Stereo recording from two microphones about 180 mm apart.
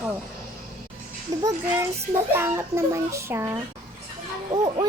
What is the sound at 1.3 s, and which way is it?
A child's voice, 20° right (ahead or behind).